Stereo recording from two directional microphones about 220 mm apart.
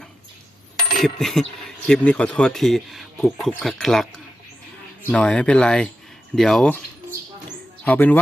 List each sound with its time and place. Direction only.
0.9 s speech: centre (ahead or behind)
5.0 s speech: 5° left (ahead or behind)
7.9 s speech: 10° left (ahead or behind)